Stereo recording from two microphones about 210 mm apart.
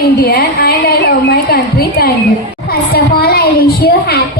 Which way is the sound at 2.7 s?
45° left (ahead or behind).